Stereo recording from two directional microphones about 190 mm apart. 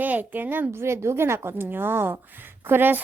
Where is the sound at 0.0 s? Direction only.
10° right (ahead or behind).